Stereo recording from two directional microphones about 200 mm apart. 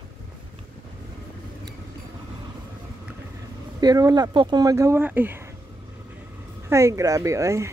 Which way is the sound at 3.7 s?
20° right (ahead or behind).